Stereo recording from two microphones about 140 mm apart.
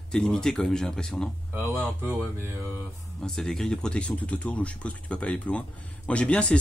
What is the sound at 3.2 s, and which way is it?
Speech, 5° left (ahead or behind).